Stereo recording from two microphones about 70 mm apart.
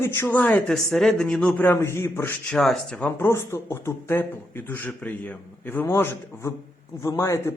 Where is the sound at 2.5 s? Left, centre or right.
Centre.